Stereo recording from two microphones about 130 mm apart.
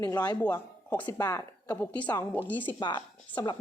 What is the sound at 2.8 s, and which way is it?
Speech, 35° left (ahead or behind).